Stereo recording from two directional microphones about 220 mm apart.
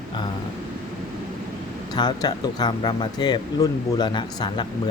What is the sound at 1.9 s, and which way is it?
Speech, 20° left (ahead or behind).